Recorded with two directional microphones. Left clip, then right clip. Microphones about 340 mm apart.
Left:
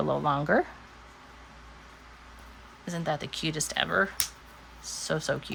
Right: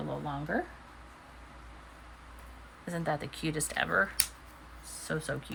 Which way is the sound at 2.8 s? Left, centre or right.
Centre.